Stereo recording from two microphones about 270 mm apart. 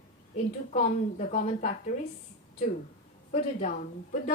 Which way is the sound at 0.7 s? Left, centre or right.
Left.